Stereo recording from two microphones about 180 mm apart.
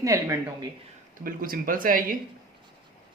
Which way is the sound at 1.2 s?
50° right (ahead or behind).